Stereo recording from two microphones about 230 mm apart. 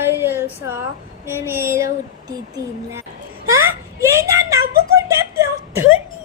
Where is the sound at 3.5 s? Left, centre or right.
Centre.